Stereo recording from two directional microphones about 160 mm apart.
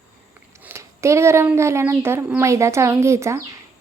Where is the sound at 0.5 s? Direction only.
15° right (ahead or behind).